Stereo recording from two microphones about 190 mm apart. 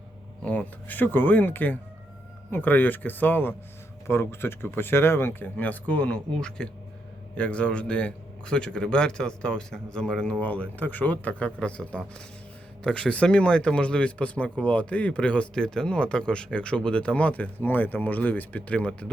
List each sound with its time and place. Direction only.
0.4 s speech: 10° left (ahead or behind)